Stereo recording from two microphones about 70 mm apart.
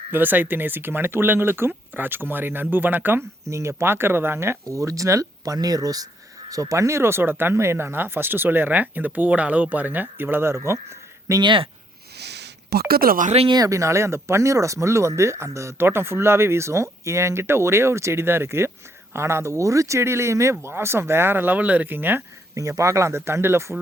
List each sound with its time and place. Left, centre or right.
0.1 s speech: right
3.5 s speech: right
6.5 s speech: right
13.7 s speech: right
22.5 s speech: right